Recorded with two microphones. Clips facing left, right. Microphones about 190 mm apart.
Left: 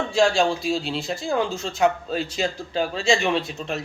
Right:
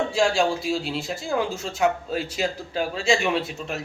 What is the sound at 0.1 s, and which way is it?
Speech, 5° right (ahead or behind).